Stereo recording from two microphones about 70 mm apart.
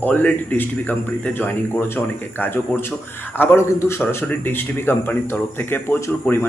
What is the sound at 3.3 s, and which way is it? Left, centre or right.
A man's voice, left.